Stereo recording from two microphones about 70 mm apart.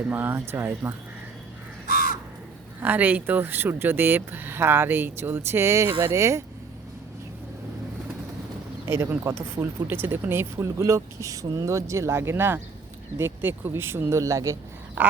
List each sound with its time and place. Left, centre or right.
0.1 s speech: right
2.8 s speech: right
8.9 s speech: right
15.0 s a sound: right